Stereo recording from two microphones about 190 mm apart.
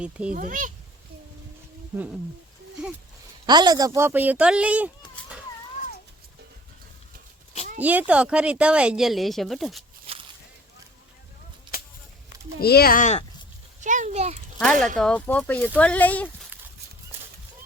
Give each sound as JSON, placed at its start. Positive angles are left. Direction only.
{"t": 0.0, "sound": "speech", "side_deg": -5}
{"t": 0.3, "sound": "a child's voice", "side_deg": -45}
{"t": 3.4, "sound": "speech", "side_deg": -20}
{"t": 7.8, "sound": "speech", "side_deg": -10}
{"t": 10.1, "sound": "a sound", "side_deg": -30}
{"t": 11.7, "sound": "a sound", "side_deg": 50}
{"t": 12.5, "sound": "speech", "side_deg": 55}
{"t": 13.8, "sound": "a child's voice", "side_deg": -40}
{"t": 14.6, "sound": "speech", "side_deg": 5}